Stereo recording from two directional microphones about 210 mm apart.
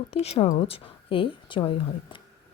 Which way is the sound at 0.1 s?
30° left (ahead or behind).